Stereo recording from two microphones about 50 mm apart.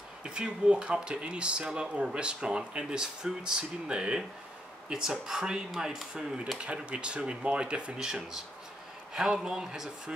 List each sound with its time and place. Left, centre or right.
0.2 s speech: centre
9.1 s speech: centre